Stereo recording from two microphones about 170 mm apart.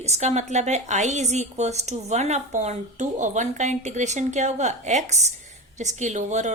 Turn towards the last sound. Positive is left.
turn(degrees=-45)  # may be behind; listen again after turning